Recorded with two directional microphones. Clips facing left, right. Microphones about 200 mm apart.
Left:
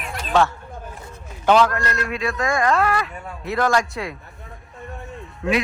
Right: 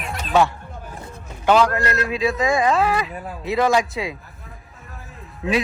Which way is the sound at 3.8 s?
Centre (ahead or behind).